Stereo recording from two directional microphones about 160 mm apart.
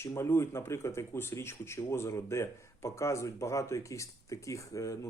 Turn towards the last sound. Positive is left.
turn(degrees=20)  # may be behind; listen again after turning